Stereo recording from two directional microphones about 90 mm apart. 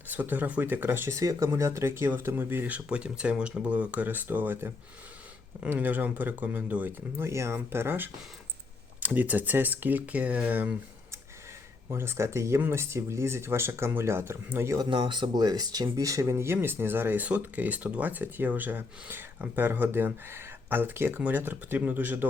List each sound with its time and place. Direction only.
0.1 s speech: 20° right (ahead or behind)
1.1 s speech: 35° right (ahead or behind); by 7.3 s 20° right (ahead or behind)
7.3 s speech: 30° right (ahead or behind)
11.9 s speech: 30° right (ahead or behind)
14.8 s speech: 60° right (ahead or behind); by 22.3 s 20° right (ahead or behind)